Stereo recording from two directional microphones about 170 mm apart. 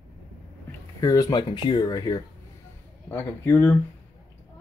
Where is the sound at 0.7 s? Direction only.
20° left (ahead or behind).